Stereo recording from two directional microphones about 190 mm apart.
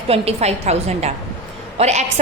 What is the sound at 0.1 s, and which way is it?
A woman's voice, 35° right (ahead or behind).